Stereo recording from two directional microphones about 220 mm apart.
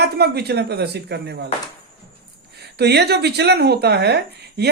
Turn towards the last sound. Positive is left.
turn(degrees=-50)  # may be behind; listen again after turning